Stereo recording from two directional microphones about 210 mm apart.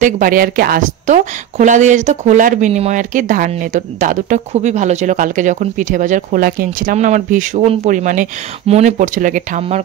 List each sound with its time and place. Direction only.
0.0 s a woman's voice: 40° right (ahead or behind)